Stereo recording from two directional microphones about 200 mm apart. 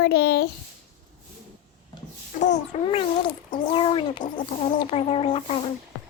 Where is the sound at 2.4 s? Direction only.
35° left (ahead or behind).